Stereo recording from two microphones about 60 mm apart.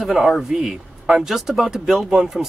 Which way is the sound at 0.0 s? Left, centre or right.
Centre.